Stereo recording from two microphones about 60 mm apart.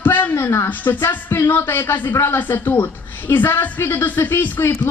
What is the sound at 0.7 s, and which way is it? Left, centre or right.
A woman's voice, left.